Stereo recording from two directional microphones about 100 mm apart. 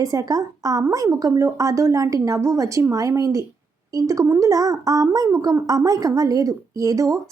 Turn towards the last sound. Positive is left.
turn(degrees=-35)  # may be behind; listen again after turning